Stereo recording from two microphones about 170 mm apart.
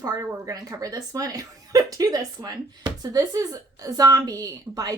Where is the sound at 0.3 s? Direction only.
20° right (ahead or behind).